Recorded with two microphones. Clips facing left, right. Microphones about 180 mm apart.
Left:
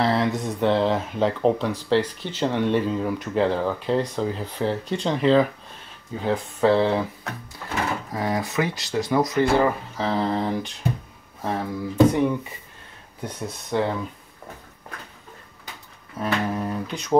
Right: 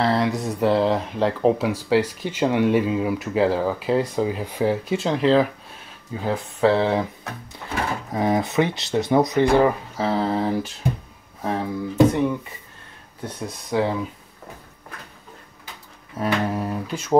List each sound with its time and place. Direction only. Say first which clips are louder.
0.0 s speech: right 1 dB; centre (ahead or behind)
8.1 s speech: right 4 dB; 20° right (ahead or behind); by 12.4 s centre (ahead or behind)
13.7 s speech: right 2 dB; 5° right (ahead or behind)
16.2 s speech: right 2 dB; 5° right (ahead or behind)